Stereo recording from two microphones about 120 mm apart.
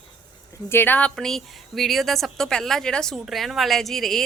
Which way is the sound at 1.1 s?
5° left (ahead or behind).